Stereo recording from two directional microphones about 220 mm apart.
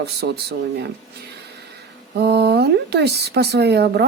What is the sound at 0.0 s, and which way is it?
Speech, 50° right (ahead or behind).